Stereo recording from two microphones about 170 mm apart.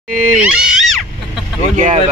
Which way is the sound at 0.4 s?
5° right (ahead or behind).